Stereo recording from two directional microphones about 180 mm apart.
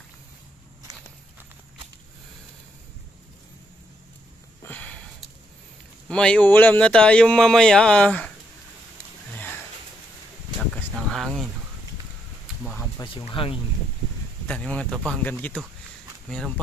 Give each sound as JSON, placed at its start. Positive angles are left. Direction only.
{"t": 4.6, "sound": "sniff", "side_deg": 10}
{"t": 6.0, "sound": "speech", "side_deg": 5}
{"t": 9.3, "sound": "sniff", "side_deg": 10}
{"t": 10.7, "sound": "a sound", "side_deg": 0}
{"t": 13.0, "sound": "speech", "side_deg": 30}
{"t": 14.5, "sound": "speech", "side_deg": 5}